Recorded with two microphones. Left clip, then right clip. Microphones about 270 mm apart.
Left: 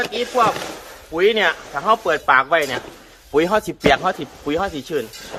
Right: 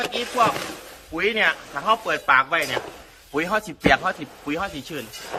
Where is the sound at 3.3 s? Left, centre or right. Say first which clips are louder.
Left 6 dB; left.